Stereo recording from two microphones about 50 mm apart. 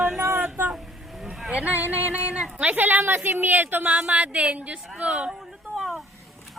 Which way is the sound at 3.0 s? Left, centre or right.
Right.